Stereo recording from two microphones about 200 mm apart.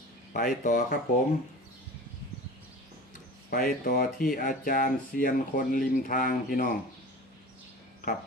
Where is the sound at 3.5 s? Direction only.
45° left (ahead or behind).